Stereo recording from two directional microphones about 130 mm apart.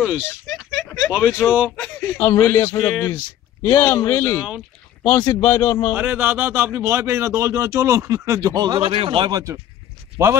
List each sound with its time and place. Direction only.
0.0 s a sound: 5° right (ahead or behind)
1.4 s speech: 10° right (ahead or behind)
2.0 s a man's voice: 15° left (ahead or behind)
3.6 s a man's voice: 20° left (ahead or behind)
4.4 s speech: 10° right (ahead or behind)
5.0 s a man's voice: 15° left (ahead or behind)
5.9 s speech: 15° right (ahead or behind); by 8.8 s 30° right (ahead or behind)
8.8 s speech: 45° right (ahead or behind)
9.3 s speech: 25° right (ahead or behind)